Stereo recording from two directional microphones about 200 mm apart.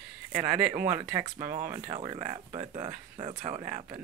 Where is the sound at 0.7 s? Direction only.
15° right (ahead or behind).